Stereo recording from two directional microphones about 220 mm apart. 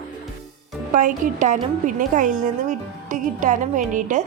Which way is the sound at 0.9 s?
35° right (ahead or behind).